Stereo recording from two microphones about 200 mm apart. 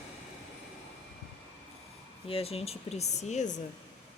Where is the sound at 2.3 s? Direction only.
30° left (ahead or behind).